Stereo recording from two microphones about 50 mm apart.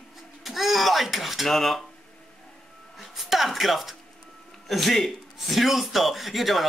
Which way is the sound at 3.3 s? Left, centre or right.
Centre.